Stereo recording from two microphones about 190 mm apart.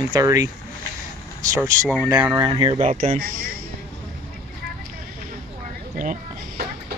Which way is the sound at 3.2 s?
55° right (ahead or behind).